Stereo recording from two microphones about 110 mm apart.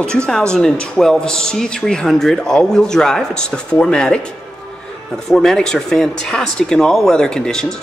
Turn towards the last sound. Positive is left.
turn(degrees=5)  # may be behind; listen again after turning